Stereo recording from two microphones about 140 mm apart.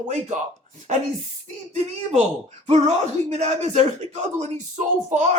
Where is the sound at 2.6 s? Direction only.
55° right (ahead or behind).